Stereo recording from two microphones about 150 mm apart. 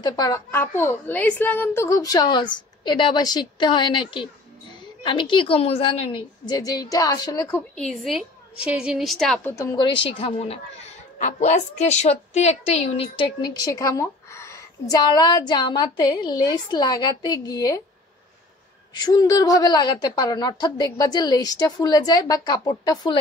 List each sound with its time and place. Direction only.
0.0 s a woman's voice: 25° left (ahead or behind)
0.5 s a woman's voice: 15° left (ahead or behind)
7.7 s a woman's voice: 5° left (ahead or behind)
9.4 s a woman's voice: 15° left (ahead or behind)
9.8 s a woman's voice: 30° left (ahead or behind)
11.1 s a woman's voice: 55° left (ahead or behind); by 17.8 s 25° left (ahead or behind)
18.9 s a woman's voice: 25° left (ahead or behind)